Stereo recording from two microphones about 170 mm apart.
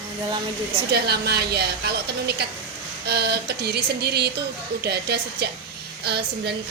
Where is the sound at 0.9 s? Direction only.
70° right (ahead or behind).